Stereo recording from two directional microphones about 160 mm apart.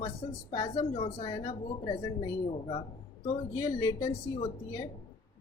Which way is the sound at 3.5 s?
25° left (ahead or behind).